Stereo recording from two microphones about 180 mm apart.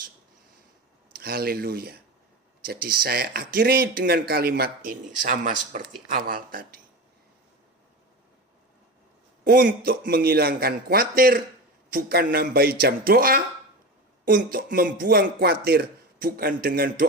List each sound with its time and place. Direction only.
1.2 s a man's voice: 55° right (ahead or behind)
9.4 s a man's voice: 55° right (ahead or behind)